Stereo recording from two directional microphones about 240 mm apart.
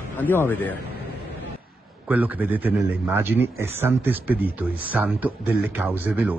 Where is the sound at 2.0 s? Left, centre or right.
Centre.